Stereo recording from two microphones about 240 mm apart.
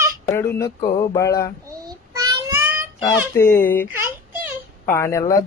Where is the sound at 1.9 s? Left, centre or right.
Centre.